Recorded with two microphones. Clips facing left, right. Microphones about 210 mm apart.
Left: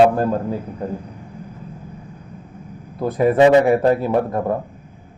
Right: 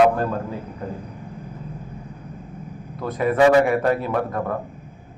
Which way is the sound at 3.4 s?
20° left (ahead or behind).